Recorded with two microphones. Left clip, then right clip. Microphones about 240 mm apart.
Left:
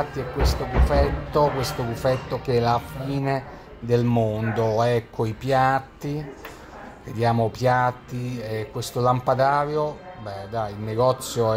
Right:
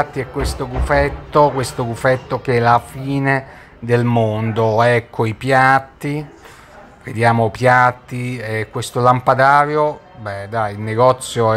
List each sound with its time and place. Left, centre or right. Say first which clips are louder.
0.0 s speech: right 6 dB; centre